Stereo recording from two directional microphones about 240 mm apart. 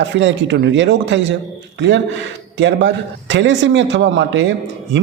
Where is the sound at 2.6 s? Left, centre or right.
Right.